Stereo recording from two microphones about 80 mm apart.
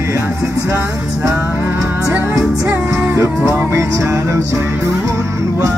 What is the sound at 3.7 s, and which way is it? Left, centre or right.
Music, right.